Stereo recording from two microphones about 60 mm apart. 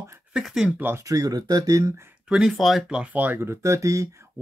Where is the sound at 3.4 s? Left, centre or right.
Right.